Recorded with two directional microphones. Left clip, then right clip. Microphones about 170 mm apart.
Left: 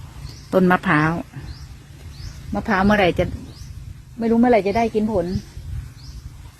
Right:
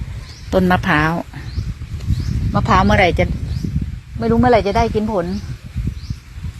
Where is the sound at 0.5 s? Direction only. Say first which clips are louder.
Right 2 dB; 20° left (ahead or behind).